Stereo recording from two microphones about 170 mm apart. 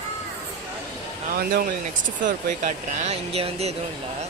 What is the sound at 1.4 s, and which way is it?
Speech, 60° right (ahead or behind).